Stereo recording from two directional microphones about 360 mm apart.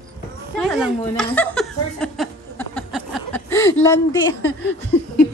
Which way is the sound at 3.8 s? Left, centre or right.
Centre.